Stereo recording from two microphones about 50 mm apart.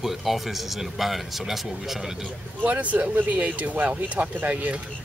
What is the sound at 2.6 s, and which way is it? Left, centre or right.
Speech, right.